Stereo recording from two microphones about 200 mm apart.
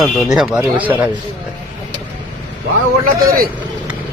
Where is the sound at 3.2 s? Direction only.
45° right (ahead or behind).